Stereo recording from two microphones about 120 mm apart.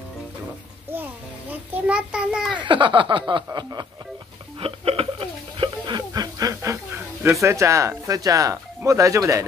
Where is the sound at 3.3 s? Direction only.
35° right (ahead or behind).